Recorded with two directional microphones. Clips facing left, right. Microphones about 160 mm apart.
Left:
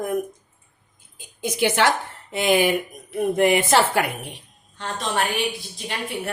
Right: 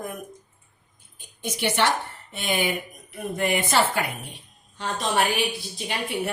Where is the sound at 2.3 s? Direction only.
90° left.